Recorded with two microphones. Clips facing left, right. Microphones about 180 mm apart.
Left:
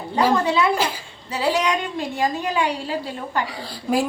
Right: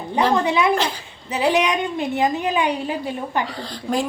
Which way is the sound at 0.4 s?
20° right (ahead or behind).